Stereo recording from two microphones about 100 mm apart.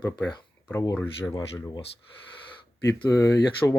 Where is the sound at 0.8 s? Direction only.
25° left (ahead or behind).